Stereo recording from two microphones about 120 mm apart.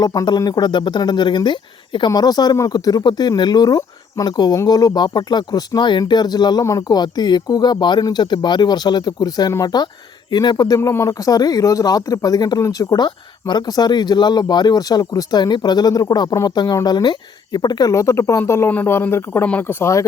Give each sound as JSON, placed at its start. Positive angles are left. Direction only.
{"t": 0.0, "sound": "speech", "side_deg": 30}
{"t": 10.8, "sound": "speech", "side_deg": 20}